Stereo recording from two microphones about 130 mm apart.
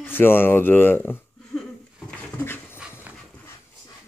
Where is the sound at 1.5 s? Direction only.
5° left (ahead or behind).